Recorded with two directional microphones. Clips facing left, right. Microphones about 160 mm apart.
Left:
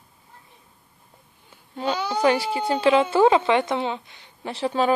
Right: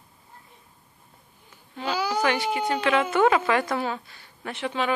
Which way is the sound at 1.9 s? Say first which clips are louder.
Even; 10° right (ahead or behind).